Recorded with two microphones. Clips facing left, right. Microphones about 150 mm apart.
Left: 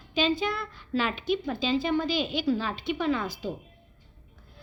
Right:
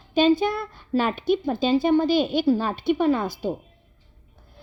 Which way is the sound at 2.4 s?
35° right (ahead or behind).